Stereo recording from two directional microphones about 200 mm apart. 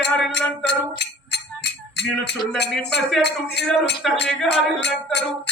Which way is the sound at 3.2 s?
55° left (ahead or behind).